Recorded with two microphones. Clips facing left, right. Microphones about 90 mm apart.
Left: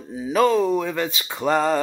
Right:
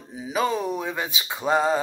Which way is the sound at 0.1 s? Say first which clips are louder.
Left 6 dB; 15° right (ahead or behind).